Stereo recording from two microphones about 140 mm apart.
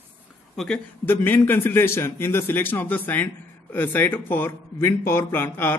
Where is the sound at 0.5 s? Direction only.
5° left (ahead or behind).